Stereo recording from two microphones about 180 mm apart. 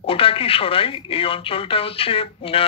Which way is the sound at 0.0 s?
30° left (ahead or behind).